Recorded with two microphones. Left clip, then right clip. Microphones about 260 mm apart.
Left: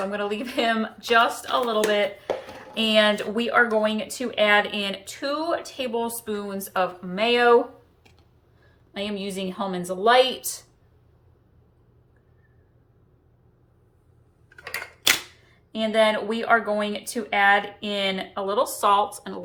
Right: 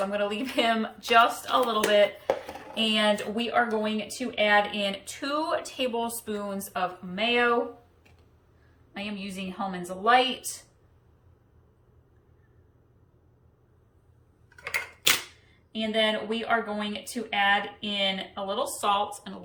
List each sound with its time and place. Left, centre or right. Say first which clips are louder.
0.1 s a woman's voice: left 1 dB; centre
7.2 s speech: left 5 dB; left
8.9 s a woman's voice: left 7 dB; left
14.6 s camera: left 1 dB; centre
15.7 s a woman's voice: left 6 dB; centre